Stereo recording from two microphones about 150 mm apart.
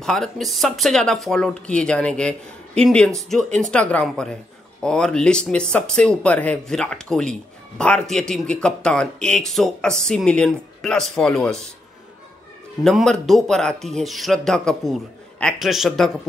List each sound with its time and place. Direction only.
0.0 s speech: 5° left (ahead or behind)
12.8 s speech: 5° left (ahead or behind)